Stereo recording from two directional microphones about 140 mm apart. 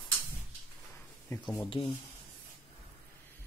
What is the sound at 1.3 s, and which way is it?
Speech, 20° left (ahead or behind).